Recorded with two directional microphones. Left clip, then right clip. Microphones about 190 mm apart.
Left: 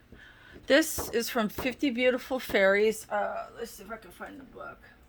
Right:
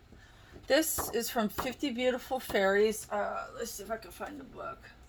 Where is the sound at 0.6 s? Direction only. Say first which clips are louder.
Left 4 dB; 65° left (ahead or behind).